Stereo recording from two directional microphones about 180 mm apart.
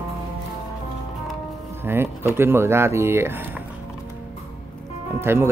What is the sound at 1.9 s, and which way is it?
Speech, 15° right (ahead or behind).